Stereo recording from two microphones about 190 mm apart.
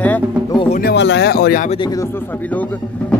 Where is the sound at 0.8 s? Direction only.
60° left (ahead or behind).